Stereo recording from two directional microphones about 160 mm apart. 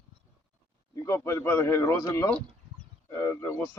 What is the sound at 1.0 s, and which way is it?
A man's voice, 15° left (ahead or behind).